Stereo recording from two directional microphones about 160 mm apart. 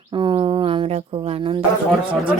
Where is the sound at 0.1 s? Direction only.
30° right (ahead or behind).